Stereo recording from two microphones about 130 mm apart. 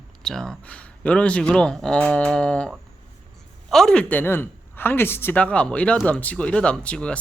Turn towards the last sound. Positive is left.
turn(degrees=10)  # may be behind; listen again after turning